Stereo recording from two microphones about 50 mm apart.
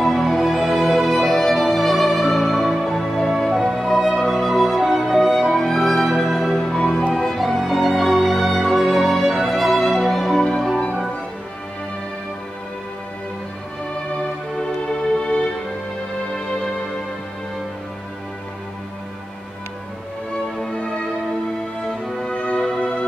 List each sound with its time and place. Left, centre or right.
0.0 s music: centre
6.6 s music: centre
7.2 s music: centre
10.4 s music: centre
15.2 s music: centre
20.7 s music: left
22.2 s music: centre